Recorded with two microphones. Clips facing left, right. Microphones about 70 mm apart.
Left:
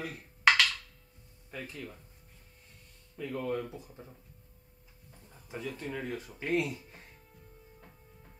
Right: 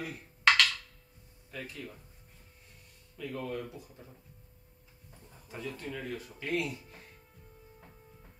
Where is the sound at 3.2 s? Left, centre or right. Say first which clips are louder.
Left 3 dB; left.